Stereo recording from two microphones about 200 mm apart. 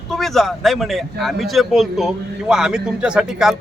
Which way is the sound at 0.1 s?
Centre (ahead or behind).